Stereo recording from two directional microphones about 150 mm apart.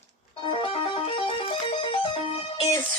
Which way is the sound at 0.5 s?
35° left (ahead or behind).